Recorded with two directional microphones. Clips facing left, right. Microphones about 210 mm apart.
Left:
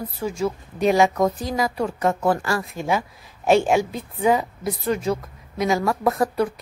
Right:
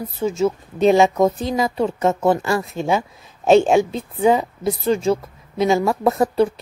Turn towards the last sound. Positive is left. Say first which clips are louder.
# right 4 dB
turn(degrees=-25)  # may be behind; listen again after turning